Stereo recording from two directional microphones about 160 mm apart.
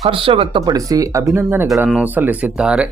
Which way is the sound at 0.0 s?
35° right (ahead or behind).